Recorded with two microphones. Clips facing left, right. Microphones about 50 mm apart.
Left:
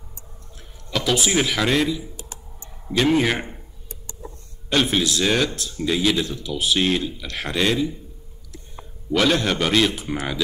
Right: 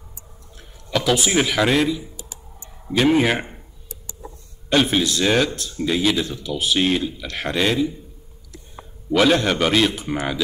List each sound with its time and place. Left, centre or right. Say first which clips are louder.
0.6 s a man's voice: right 3 dB; centre
2.1 s clicking: left 1 dB; left
2.9 s a man's voice: right 2 dB; centre
4.6 s speech: right 2 dB; centre
9.1 s speech: right 3 dB; centre